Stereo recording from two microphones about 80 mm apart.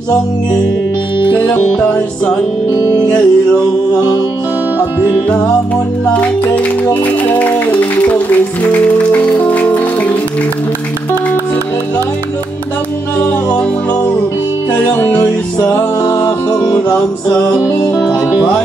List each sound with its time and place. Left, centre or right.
1.5 s music: left
6.5 s speech: centre
8.8 s music: centre
13.2 s music: left
16.0 s music: left
17.6 s music: left